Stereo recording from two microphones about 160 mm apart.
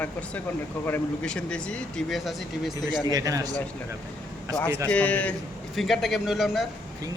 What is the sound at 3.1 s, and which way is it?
Speech, 20° right (ahead or behind).